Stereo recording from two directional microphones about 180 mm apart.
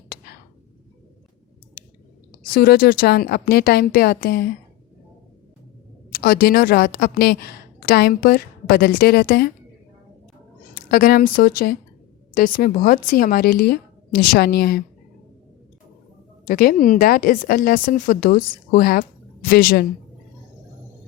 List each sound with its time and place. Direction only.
2.4 s a woman's voice: 55° left (ahead or behind)
6.1 s a woman's voice: 55° left (ahead or behind)
10.9 s a woman's voice: 55° left (ahead or behind)
16.5 s a woman's voice: 55° left (ahead or behind)